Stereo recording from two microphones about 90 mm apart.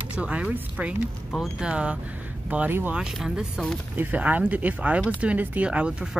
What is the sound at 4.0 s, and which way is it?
Speech, 20° right (ahead or behind).